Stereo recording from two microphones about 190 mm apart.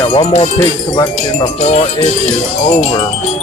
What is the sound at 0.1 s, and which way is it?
Music, 30° left (ahead or behind).